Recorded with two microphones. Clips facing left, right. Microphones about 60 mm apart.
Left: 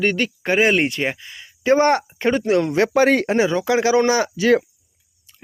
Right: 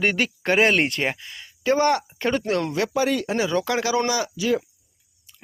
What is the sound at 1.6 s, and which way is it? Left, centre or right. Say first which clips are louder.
Speech: left 4 dB; left.